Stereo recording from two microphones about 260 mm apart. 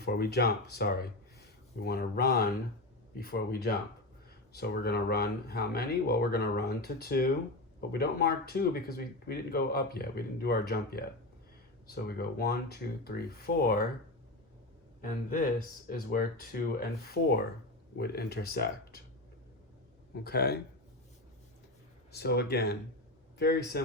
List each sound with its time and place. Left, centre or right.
0.0 s speech: left
15.0 s speech: left
16.5 s speech: left
20.2 s speech: left
22.1 s speech: left